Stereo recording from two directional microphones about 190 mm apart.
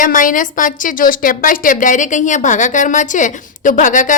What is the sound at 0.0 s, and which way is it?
A woman's voice, 45° left (ahead or behind).